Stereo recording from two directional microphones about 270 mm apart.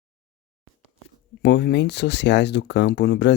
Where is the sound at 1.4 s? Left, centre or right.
Left.